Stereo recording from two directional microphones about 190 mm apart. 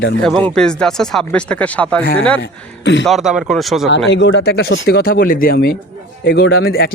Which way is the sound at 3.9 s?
70° left (ahead or behind).